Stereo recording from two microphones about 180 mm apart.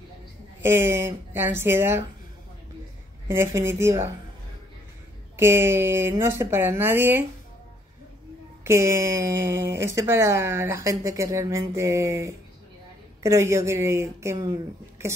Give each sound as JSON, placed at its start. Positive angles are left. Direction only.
{"t": 0.6, "sound": "speech", "side_deg": -15}
{"t": 3.3, "sound": "speech", "side_deg": -15}
{"t": 5.3, "sound": "speech", "side_deg": -15}
{"t": 8.6, "sound": "speech", "side_deg": -15}